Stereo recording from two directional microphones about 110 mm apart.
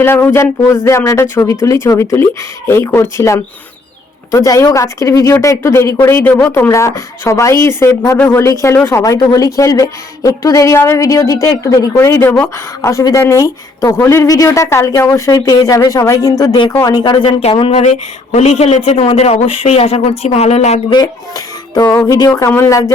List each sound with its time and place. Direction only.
0.0 s speech: 20° left (ahead or behind)
14.2 s speech: 35° left (ahead or behind)
17.4 s a man's voice: 60° left (ahead or behind); by 18.8 s 85° left
18.9 s speech: 70° left (ahead or behind); by 20.8 s 85° left
20.9 s speech: 35° left (ahead or behind)